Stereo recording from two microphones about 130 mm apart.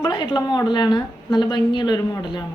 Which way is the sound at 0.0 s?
35° left (ahead or behind).